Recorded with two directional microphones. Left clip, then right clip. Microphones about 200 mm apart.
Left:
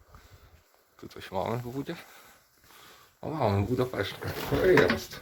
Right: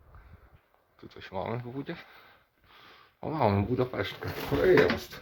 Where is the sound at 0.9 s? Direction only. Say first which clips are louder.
Left 3 dB; 25° left (ahead or behind); by 2.3 s centre (ahead or behind).